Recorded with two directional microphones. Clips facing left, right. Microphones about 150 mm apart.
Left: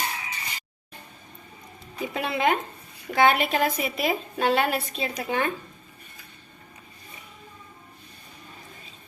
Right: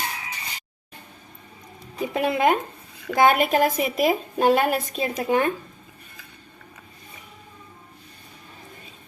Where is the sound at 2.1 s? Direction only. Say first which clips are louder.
Right 4 dB; 50° right (ahead or behind).